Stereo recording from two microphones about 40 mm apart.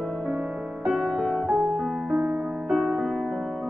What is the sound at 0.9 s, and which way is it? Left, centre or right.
Music, centre.